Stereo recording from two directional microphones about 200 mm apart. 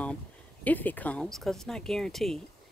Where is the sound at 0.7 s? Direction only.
10° left (ahead or behind).